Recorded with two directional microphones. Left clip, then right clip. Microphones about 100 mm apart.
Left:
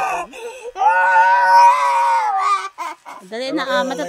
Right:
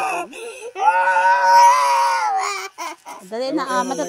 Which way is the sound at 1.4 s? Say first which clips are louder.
Left 1 dB; 10° right (ahead or behind).